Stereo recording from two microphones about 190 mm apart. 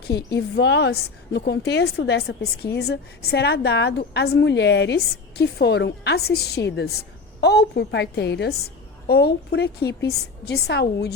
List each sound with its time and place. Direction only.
0.3 s a woman's voice: 65° left (ahead or behind)